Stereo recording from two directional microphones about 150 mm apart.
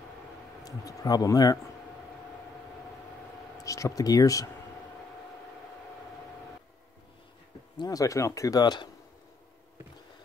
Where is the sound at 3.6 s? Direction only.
20° left (ahead or behind).